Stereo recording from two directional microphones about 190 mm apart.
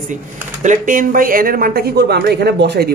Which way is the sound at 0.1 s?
40° right (ahead or behind).